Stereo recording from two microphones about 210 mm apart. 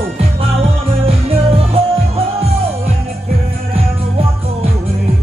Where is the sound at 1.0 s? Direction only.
25° right (ahead or behind).